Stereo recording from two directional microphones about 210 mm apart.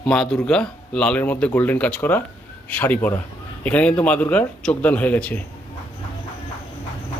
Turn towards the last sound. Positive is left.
turn(degrees=5)  # may be behind; listen again after turning